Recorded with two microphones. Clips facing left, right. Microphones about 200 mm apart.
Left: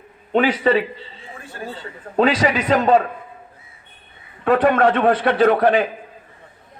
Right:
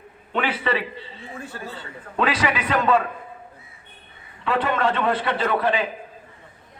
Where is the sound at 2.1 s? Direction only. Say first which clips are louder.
Left 6 dB; 35° left (ahead or behind).